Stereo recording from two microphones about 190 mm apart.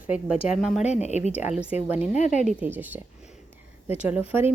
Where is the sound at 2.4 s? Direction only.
10° right (ahead or behind).